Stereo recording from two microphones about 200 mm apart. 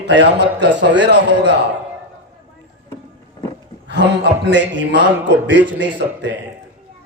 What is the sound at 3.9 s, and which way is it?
A man's voice, 60° right (ahead or behind).